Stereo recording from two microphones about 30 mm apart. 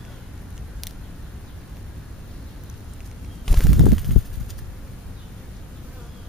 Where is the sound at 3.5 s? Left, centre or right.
Centre.